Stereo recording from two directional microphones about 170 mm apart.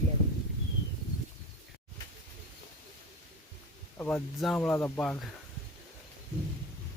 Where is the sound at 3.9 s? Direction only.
10° left (ahead or behind).